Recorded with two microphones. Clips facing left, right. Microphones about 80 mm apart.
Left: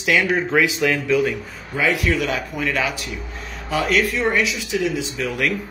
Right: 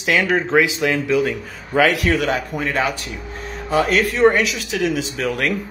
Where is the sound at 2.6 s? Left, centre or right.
Right.